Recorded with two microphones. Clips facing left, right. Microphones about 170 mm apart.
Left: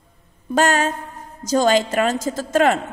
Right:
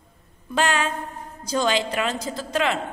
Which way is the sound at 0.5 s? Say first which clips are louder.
Left 5 dB; 40° left (ahead or behind).